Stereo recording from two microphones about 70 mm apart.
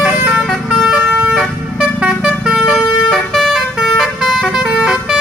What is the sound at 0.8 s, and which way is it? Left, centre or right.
Vehicle, centre.